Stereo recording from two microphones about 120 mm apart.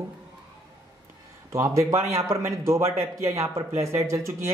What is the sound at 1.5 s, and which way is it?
A man's voice, 25° right (ahead or behind).